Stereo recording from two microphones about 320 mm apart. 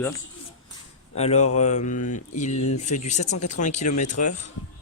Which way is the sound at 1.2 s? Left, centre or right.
Centre.